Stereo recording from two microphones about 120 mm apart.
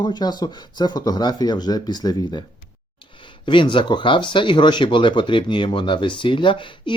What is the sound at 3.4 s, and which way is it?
Speech, 40° left (ahead or behind).